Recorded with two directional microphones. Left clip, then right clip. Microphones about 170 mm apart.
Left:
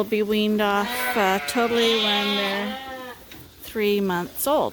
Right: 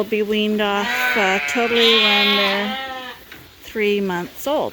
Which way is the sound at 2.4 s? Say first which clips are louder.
Right 6 dB; 20° right (ahead or behind).